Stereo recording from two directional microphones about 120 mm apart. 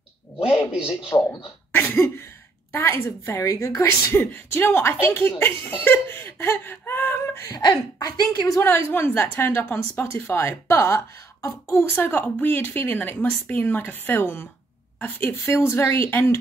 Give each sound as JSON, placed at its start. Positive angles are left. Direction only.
{"t": 0.7, "sound": "a man's voice", "side_deg": -10}
{"t": 1.7, "sound": "cough", "side_deg": 15}
{"t": 2.7, "sound": "a woman's voice", "side_deg": 20}
{"t": 7.5, "sound": "a woman's voice", "side_deg": 35}